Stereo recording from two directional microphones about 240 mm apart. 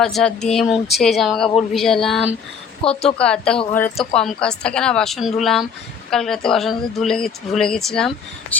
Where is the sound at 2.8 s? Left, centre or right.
Left.